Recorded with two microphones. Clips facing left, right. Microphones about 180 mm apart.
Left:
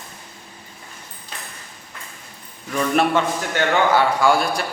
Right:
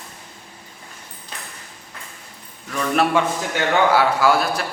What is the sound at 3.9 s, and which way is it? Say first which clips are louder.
Speech: even; 5° right (ahead or behind).